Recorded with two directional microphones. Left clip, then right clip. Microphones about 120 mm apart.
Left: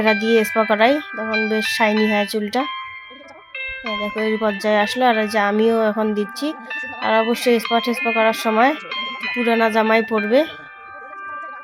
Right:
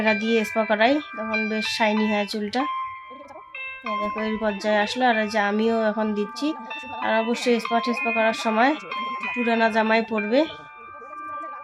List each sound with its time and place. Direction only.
0.0 s speech: 30° left (ahead or behind)